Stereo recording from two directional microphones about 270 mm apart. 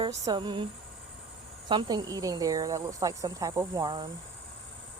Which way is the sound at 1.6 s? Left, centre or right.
Centre.